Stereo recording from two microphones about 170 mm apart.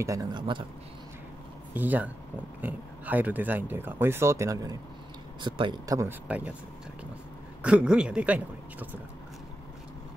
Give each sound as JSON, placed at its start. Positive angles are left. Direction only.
{"t": 0.0, "sound": "speech", "side_deg": -20}
{"t": 1.7, "sound": "speech", "side_deg": -10}
{"t": 6.2, "sound": "speech", "side_deg": -5}
{"t": 7.6, "sound": "speech", "side_deg": -5}